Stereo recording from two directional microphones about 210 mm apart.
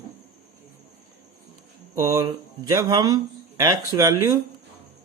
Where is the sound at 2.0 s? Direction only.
15° right (ahead or behind).